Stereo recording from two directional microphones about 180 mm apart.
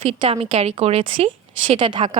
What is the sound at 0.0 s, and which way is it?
A woman's voice, 30° right (ahead or behind).